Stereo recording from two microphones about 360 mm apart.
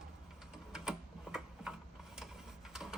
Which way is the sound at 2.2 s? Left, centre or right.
Centre.